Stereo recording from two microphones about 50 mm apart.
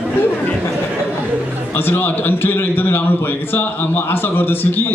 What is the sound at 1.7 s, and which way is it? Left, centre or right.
A man's voice, left.